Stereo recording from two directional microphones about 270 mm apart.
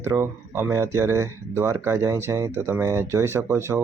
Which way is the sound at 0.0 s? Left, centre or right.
Centre.